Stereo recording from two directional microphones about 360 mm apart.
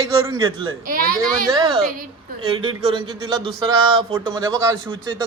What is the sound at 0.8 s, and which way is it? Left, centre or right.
Speech, right.